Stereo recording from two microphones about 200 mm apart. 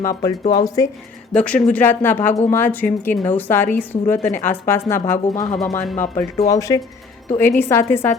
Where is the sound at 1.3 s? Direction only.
5° left (ahead or behind).